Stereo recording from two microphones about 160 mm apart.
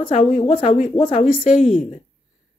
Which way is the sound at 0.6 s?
50° left (ahead or behind).